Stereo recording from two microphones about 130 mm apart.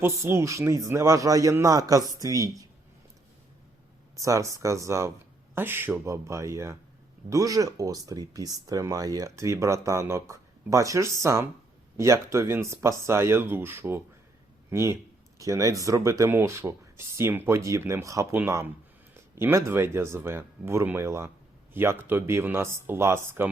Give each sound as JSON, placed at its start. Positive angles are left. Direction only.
{"t": 0.0, "sound": "speech", "side_deg": -20}
{"t": 4.1, "sound": "speech", "side_deg": -25}